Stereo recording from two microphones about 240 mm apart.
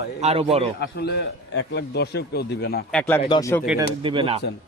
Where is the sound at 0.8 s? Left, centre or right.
Left.